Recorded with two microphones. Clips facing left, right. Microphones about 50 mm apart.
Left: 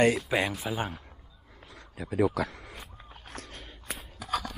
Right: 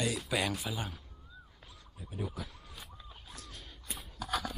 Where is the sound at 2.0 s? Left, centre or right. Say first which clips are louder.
Left 14 dB; left.